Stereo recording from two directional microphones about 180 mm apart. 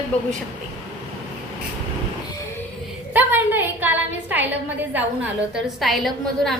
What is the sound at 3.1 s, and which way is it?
A woman's voice, 10° right (ahead or behind).